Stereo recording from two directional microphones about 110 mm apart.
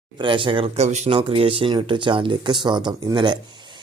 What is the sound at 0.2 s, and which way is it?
Speech, 50° right (ahead or behind).